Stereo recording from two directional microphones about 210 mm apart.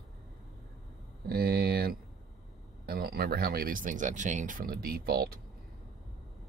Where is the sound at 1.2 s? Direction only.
45° right (ahead or behind).